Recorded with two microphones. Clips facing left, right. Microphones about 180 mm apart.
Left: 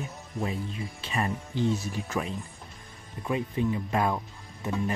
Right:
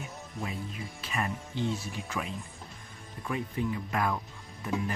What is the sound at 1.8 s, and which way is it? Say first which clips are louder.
Speech: left 5 dB; 40° left (ahead or behind).